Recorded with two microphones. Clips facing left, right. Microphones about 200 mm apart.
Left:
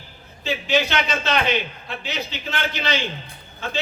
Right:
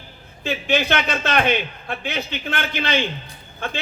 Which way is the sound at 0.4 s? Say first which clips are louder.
Right 1 dB; 55° right (ahead or behind).